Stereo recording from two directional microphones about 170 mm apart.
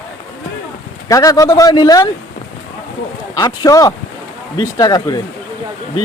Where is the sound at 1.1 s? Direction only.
20° left (ahead or behind).